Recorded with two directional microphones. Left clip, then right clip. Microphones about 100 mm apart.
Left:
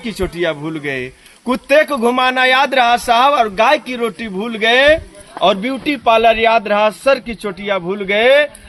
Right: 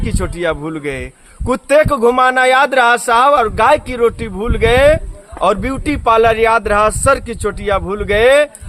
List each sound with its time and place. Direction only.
0.3 s a man's voice: 30° right (ahead or behind)
1.9 s speech: 40° right (ahead or behind)